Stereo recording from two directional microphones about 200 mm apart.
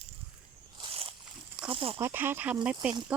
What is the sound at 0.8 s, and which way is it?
Walk, 30° right (ahead or behind).